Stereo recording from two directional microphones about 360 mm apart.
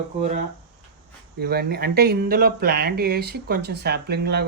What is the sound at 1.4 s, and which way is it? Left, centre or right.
Speech, right.